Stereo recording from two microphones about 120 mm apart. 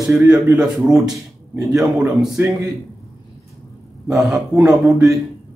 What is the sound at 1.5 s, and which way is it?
Speech, 25° right (ahead or behind).